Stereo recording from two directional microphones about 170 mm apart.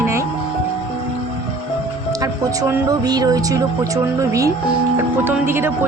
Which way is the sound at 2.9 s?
20° right (ahead or behind).